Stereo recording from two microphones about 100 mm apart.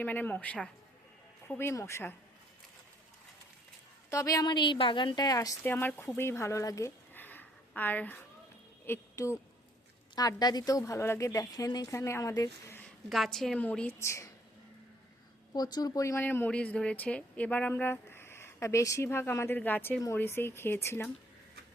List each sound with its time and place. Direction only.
0.0 s speech: 15° left (ahead or behind)
1.5 s speech: 25° left (ahead or behind)
4.1 s a woman's voice: 35° left (ahead or behind)
5.6 s speech: 20° left (ahead or behind)
7.1 s a sound: 20° left (ahead or behind)
7.8 s speech: 20° left (ahead or behind)
8.9 s speech: 30° left (ahead or behind)
10.2 s speech: 40° left (ahead or behind)
13.1 s a woman's voice: centre (ahead or behind)
13.6 s speech: 15° left (ahead or behind)
14.0 s a woman's voice: 30° left (ahead or behind)
15.5 s speech: 40° left (ahead or behind)
16.2 s speech: 20° left (ahead or behind)
16.5 s speech: 10° left (ahead or behind)